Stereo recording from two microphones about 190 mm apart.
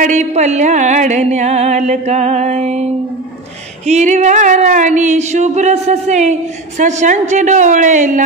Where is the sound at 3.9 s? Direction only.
40° right (ahead or behind).